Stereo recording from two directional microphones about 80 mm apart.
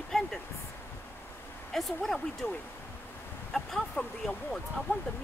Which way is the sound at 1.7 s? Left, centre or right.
Centre.